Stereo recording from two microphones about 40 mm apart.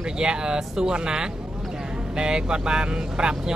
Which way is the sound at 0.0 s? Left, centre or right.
Centre.